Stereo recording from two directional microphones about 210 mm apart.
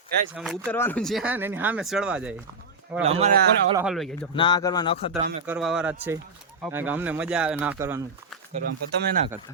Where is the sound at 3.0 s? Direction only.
30° right (ahead or behind).